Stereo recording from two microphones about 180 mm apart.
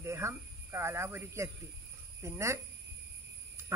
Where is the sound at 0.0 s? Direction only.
15° right (ahead or behind).